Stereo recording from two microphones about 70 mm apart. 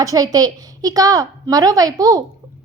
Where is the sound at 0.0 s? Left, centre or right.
Right.